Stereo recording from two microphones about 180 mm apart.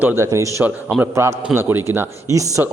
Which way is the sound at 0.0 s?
15° right (ahead or behind).